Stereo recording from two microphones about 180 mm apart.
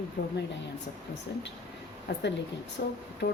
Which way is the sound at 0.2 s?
55° left (ahead or behind).